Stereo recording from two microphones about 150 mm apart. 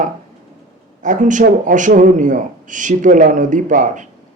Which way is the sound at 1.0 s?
55° right (ahead or behind).